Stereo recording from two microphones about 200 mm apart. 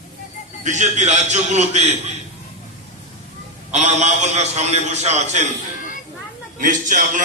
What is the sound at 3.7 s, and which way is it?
A man's voice, 35° right (ahead or behind).